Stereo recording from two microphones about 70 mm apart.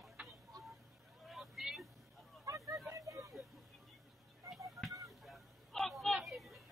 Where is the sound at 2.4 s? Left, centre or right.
Right.